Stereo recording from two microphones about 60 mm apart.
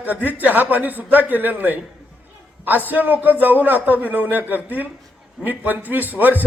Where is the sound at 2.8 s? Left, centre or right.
Right.